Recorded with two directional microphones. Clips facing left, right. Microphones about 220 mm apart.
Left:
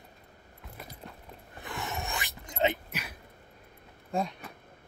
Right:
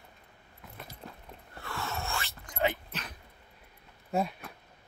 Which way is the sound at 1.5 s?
20° left (ahead or behind).